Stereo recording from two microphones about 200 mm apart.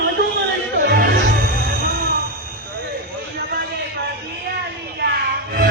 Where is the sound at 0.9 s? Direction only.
50° right (ahead or behind).